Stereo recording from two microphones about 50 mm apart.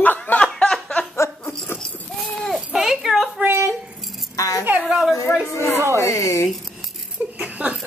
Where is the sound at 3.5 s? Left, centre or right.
Right.